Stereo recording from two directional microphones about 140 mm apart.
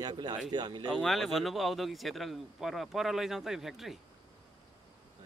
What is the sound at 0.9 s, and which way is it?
A man's voice, centre (ahead or behind).